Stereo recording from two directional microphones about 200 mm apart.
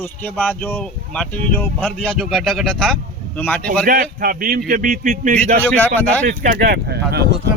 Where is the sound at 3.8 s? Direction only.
45° right (ahead or behind).